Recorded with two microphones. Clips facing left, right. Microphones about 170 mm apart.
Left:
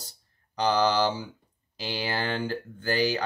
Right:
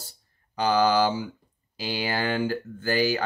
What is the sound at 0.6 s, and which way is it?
Speech, 5° right (ahead or behind).